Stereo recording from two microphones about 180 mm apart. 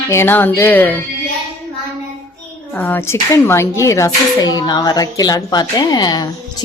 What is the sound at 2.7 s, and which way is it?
A child's voice, 10° left (ahead or behind).